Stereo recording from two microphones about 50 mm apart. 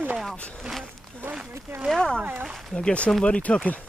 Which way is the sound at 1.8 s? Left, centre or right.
Centre.